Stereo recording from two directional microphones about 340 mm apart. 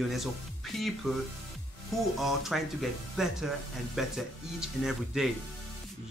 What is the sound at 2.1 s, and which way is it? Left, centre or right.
Speech, centre.